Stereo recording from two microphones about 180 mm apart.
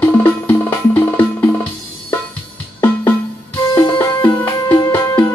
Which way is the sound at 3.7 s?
15° left (ahead or behind).